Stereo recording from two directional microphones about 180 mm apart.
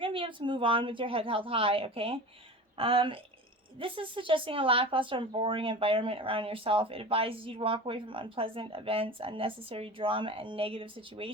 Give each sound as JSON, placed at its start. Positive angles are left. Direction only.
{"t": 0.0, "sound": "speech", "side_deg": -30}